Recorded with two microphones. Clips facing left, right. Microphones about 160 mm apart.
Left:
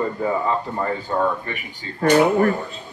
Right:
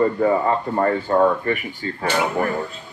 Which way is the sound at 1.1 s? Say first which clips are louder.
Right 5 dB; 65° right (ahead or behind).